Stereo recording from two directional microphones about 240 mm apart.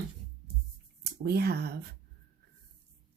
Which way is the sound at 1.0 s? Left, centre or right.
Right.